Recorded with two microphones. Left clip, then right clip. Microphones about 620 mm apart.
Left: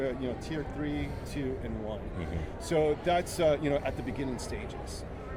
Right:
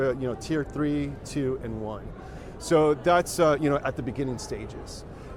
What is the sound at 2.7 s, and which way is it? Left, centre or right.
Speech, right.